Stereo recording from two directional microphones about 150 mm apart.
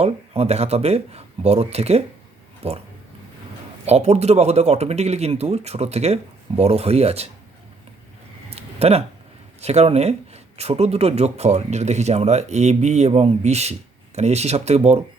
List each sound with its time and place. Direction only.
0.0 s speech: 45° right (ahead or behind)
3.8 s speech: 45° right (ahead or behind)
8.4 s a sound: 45° right (ahead or behind)
9.6 s speech: 45° right (ahead or behind)